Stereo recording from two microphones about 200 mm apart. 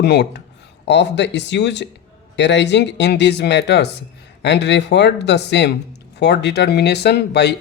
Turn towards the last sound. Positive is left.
turn(degrees=55)  # may be behind; listen again after turning